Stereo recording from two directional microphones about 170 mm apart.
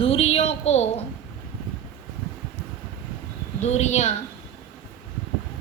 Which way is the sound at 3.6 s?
40° left (ahead or behind).